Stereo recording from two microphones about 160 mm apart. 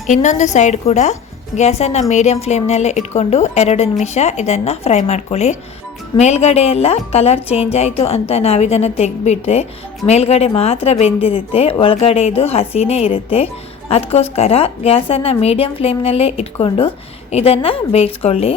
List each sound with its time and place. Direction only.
0.1 s a woman's voice: 50° left (ahead or behind)